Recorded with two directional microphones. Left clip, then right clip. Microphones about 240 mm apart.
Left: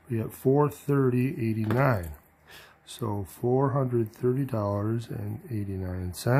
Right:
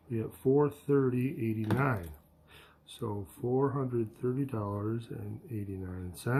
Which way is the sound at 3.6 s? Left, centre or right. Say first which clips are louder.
Left 5 dB; left.